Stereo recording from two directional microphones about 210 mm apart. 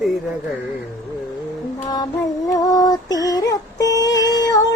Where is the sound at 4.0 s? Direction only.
15° left (ahead or behind).